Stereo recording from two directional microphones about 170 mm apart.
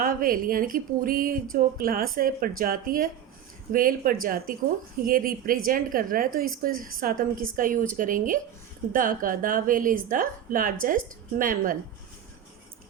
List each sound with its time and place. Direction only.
0.0 s a woman's voice: 55° right (ahead or behind)